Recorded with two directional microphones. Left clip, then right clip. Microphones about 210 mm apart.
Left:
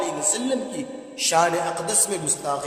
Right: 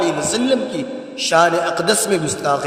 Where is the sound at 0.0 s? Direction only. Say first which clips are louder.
Right 7 dB; 30° right (ahead or behind).